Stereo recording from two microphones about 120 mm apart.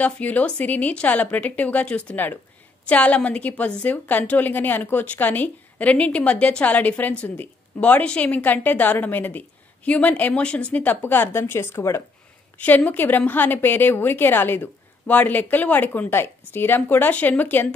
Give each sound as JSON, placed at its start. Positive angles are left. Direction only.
{"t": 0.0, "sound": "a woman's voice", "side_deg": 15}